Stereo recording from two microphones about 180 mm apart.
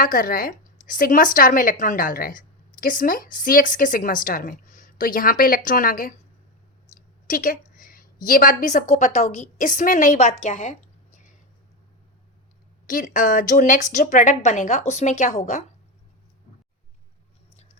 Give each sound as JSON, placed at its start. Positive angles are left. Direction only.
{"t": 0.0, "sound": "a woman's voice", "side_deg": 50}
{"t": 7.3, "sound": "a woman's voice", "side_deg": 50}
{"t": 12.9, "sound": "a woman's voice", "side_deg": 50}